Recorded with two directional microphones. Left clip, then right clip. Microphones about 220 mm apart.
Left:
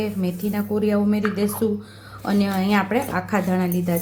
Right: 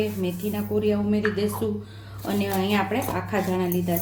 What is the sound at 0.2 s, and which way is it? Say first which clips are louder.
Speech: left 2 dB; 30° left (ahead or behind).